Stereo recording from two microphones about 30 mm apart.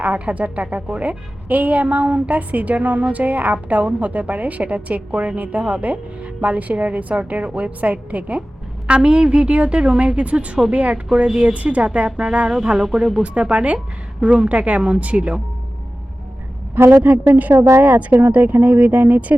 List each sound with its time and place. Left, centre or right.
0.0 s a woman's voice: right
9.0 s a woman's voice: right
10.2 s a woman's voice: right
12.0 s a woman's voice: right
12.8 s speech: right
13.2 s a woman's voice: right
16.7 s a woman's voice: right